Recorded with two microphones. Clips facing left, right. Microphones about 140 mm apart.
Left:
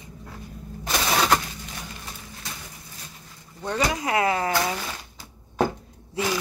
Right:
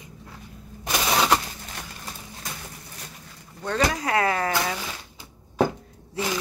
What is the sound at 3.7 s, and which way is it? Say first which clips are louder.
Speech: right 1 dB; 20° left (ahead or behind).